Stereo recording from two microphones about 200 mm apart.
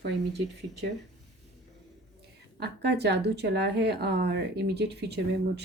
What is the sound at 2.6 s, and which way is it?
A woman's voice, 55° right (ahead or behind).